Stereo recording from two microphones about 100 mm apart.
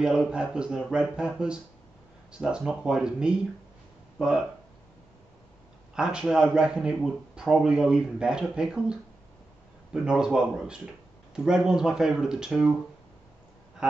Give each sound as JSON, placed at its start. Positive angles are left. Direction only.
{"t": 0.0, "sound": "a man's voice", "side_deg": -5}
{"t": 5.9, "sound": "a man's voice", "side_deg": -5}
{"t": 10.0, "sound": "a man's voice", "side_deg": -5}